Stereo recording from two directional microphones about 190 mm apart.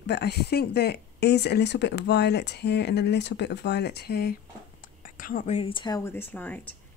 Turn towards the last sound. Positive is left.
turn(degrees=10)  # may be behind; listen again after turning